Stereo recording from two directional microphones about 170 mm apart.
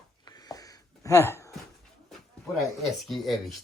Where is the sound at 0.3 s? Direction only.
25° left (ahead or behind).